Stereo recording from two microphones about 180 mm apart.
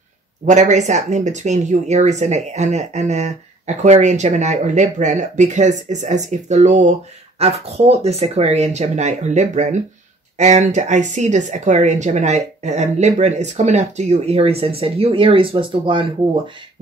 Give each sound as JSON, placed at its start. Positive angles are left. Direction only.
{"t": 0.5, "sound": "speech", "side_deg": -40}